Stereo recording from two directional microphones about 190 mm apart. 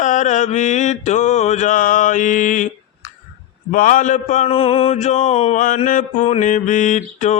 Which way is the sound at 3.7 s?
45° left (ahead or behind).